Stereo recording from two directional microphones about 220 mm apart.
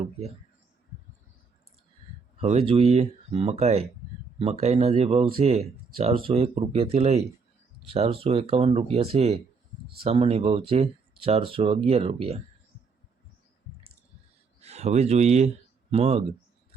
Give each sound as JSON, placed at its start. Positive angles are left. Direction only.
{"t": 2.4, "sound": "speech", "side_deg": -30}
{"t": 14.6, "sound": "speech", "side_deg": -30}